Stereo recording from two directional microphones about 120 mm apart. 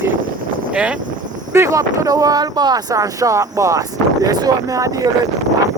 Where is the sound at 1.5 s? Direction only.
25° right (ahead or behind).